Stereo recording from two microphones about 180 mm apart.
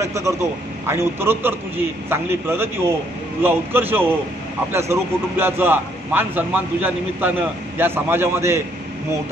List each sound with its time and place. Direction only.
0.0 s a man's voice: 15° right (ahead or behind)